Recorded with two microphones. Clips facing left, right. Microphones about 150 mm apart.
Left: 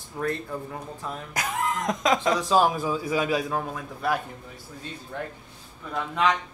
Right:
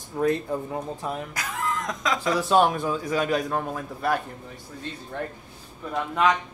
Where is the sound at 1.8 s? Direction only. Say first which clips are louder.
Left 6 dB; 25° left (ahead or behind).